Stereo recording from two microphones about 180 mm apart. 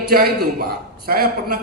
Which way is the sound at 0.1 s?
55° right (ahead or behind).